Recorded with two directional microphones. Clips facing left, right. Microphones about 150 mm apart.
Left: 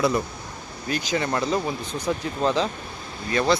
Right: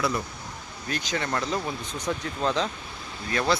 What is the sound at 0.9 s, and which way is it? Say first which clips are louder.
Speech: left 4 dB; 5° left (ahead or behind).